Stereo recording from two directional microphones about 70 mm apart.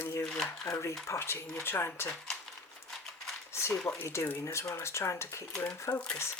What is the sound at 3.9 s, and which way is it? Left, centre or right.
Speech, left.